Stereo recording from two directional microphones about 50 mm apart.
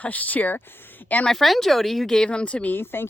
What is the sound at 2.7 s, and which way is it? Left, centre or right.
Speech, left.